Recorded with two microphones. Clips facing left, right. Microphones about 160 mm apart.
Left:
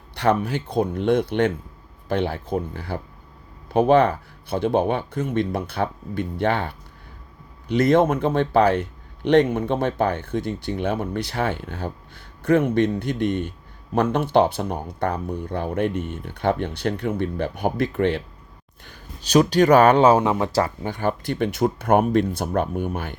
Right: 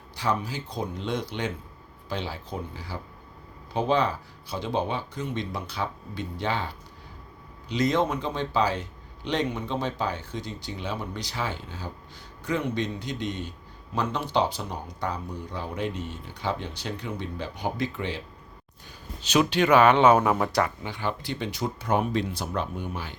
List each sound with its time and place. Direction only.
0.2 s a man's voice: 65° left (ahead or behind)
19.3 s speech: 40° left (ahead or behind)
20.8 s speech: 50° left (ahead or behind)